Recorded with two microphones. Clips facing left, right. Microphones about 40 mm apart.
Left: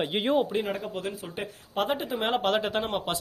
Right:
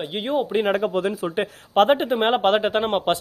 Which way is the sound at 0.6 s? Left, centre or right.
Right.